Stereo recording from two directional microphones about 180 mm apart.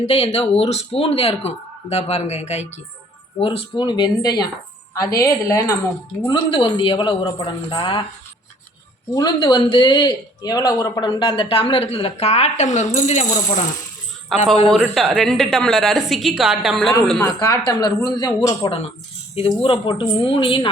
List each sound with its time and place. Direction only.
0.0 s speech: 35° left (ahead or behind)
9.1 s speech: 25° left (ahead or behind); by 13.4 s 40° left (ahead or behind)
14.3 s a woman's voice: centre (ahead or behind)
17.2 s speech: 20° left (ahead or behind)